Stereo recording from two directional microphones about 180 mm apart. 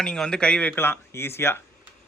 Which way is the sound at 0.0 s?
5° left (ahead or behind).